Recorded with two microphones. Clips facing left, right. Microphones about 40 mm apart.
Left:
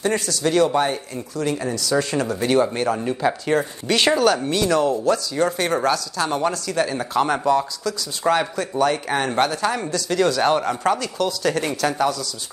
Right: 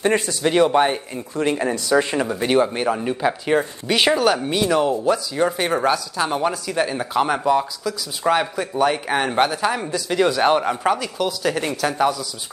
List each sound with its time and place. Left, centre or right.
0.0 s speech: right